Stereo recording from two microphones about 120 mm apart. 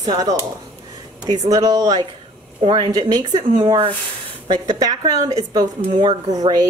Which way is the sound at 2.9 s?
30° right (ahead or behind).